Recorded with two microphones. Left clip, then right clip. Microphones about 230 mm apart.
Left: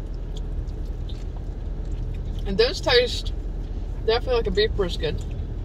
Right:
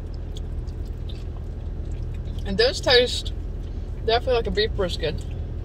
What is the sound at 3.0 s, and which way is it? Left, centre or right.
Speech, right.